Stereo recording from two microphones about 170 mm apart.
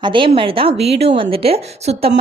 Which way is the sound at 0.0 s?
30° right (ahead or behind).